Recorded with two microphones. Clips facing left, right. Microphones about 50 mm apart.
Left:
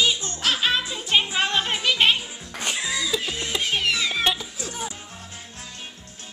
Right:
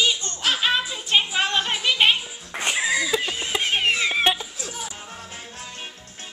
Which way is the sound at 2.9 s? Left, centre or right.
Right.